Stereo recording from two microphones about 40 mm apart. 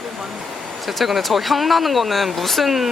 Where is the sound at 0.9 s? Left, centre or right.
Centre.